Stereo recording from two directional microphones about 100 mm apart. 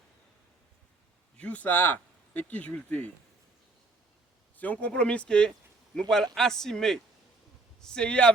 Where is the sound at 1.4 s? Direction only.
15° left (ahead or behind).